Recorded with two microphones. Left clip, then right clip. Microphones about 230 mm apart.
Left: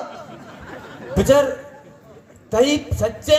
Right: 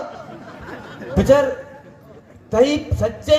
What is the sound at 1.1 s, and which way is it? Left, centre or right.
Speech, left.